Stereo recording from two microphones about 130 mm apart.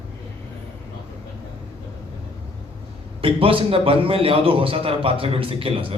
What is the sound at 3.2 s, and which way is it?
A man's voice, 45° right (ahead or behind).